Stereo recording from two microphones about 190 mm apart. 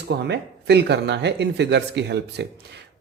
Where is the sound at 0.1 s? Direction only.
60° right (ahead or behind).